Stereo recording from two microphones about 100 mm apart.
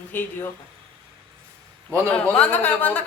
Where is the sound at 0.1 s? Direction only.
20° left (ahead or behind).